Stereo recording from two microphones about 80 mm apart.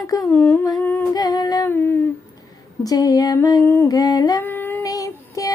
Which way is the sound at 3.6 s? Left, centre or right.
Left.